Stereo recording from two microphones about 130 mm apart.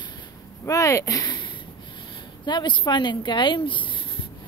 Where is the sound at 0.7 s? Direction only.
25° left (ahead or behind).